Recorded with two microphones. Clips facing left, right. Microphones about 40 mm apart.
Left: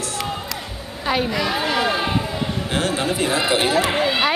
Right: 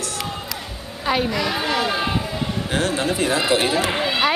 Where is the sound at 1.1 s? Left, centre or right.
Centre.